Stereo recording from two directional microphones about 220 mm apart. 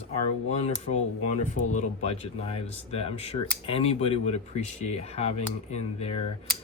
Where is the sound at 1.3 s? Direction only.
30° left (ahead or behind).